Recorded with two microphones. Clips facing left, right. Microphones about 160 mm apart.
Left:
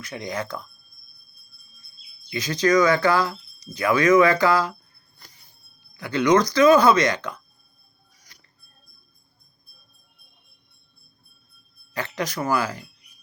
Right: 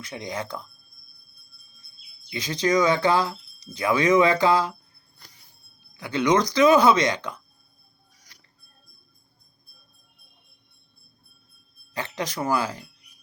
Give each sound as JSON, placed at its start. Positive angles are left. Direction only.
{"t": 0.0, "sound": "speech", "side_deg": -20}
{"t": 2.3, "sound": "speech", "side_deg": -25}
{"t": 6.0, "sound": "speech", "side_deg": -20}
{"t": 11.9, "sound": "speech", "side_deg": -25}